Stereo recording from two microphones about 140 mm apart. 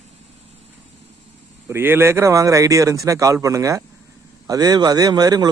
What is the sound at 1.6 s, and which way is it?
Speech, 15° right (ahead or behind).